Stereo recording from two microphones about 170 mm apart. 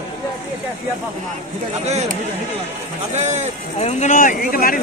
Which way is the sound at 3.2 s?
40° right (ahead or behind).